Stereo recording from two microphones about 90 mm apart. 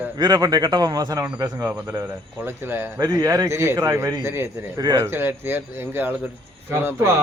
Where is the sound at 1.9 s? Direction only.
30° right (ahead or behind).